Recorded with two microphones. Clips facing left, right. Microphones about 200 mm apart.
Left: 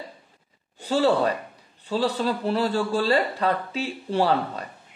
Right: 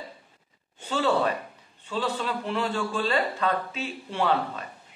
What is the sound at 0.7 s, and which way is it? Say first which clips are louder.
A man's voice: left 4 dB; 35° left (ahead or behind).